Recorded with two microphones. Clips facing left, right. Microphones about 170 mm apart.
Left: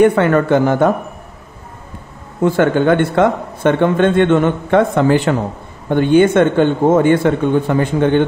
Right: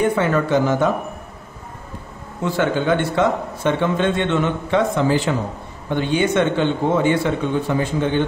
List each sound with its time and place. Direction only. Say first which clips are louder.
0.0 s a man's voice: left 7 dB; 65° left (ahead or behind)
2.4 s a man's voice: left 7 dB; 55° left (ahead or behind)